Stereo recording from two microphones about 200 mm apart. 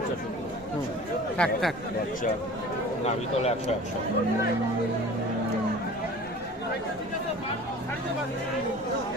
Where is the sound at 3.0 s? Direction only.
30° left (ahead or behind).